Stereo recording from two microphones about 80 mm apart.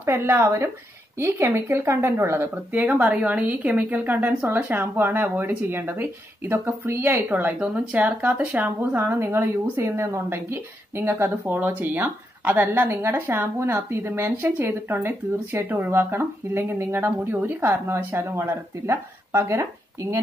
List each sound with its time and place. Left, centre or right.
0.0 s speech: right